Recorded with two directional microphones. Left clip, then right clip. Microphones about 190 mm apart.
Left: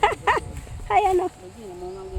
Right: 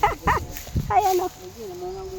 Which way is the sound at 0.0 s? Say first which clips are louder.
Left 1 dB; 40° left (ahead or behind).